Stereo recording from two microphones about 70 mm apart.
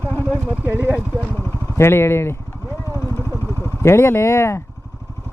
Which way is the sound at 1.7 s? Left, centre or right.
Left.